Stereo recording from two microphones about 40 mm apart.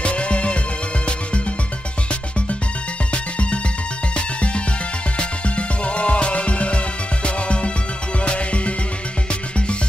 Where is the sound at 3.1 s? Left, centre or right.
Left.